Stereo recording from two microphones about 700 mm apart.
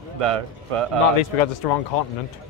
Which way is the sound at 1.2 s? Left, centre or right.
Left.